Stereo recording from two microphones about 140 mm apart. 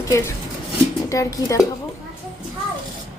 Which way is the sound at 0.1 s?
20° left (ahead or behind).